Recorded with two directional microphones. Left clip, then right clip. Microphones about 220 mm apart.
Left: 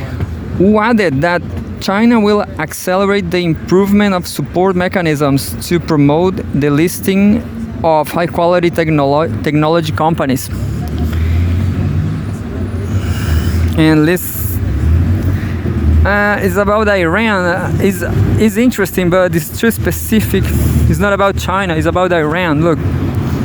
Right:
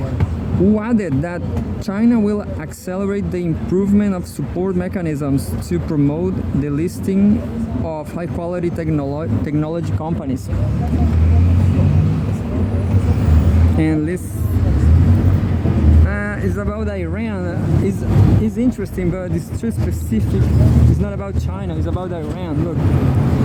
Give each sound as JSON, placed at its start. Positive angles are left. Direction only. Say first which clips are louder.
{"t": 0.8, "sound": "speech", "louder": "left 9 dB", "side_deg": 35}
{"t": 13.7, "sound": "speech", "louder": "left 9 dB", "side_deg": 40}
{"t": 16.0, "sound": "speech", "louder": "left 11 dB", "side_deg": 40}
{"t": 21.8, "sound": "speech", "louder": "left 13 dB", "side_deg": 80}
{"t": 22.1, "sound": "speech", "louder": "left 13 dB", "side_deg": 40}